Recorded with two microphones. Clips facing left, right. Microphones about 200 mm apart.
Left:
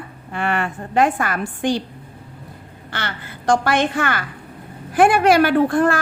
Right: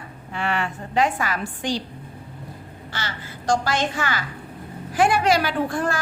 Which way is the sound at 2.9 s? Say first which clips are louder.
Left 4 dB; 60° left (ahead or behind).